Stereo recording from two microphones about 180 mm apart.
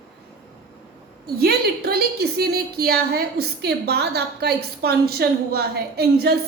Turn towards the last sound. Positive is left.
turn(degrees=-60)  # may be behind; listen again after turning